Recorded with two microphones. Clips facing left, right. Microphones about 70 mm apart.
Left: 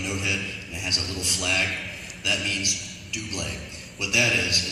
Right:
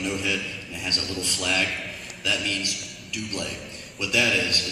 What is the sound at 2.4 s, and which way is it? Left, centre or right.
Speech, centre.